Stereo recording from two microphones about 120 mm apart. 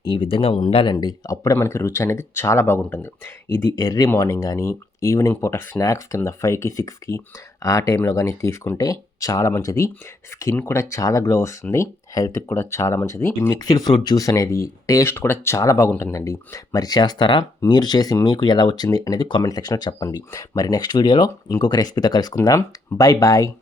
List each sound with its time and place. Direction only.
0.0 s speech: 40° left (ahead or behind)
0.9 s speech: 30° left (ahead or behind)
3.8 s speech: 30° left (ahead or behind)
13.6 s speech: 30° left (ahead or behind)